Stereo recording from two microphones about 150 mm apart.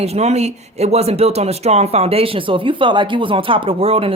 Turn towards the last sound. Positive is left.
turn(degrees=-40)  # may be behind; listen again after turning